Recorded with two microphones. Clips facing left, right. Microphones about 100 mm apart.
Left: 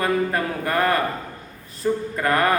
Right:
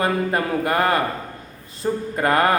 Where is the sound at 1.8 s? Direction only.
35° right (ahead or behind).